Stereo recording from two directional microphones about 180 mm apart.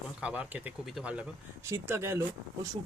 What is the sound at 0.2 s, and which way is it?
Speech, 10° right (ahead or behind).